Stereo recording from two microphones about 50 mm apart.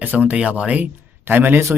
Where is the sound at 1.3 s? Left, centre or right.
Right.